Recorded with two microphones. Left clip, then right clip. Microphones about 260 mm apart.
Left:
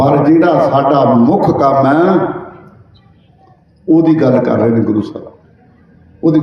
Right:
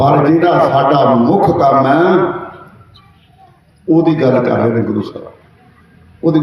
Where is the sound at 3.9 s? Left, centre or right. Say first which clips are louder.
Left 1 dB; centre.